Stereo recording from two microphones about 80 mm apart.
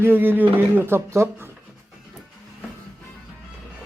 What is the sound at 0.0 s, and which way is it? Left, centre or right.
Speech, right.